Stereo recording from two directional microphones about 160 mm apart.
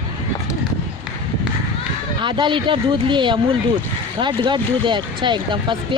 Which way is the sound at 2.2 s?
30° right (ahead or behind).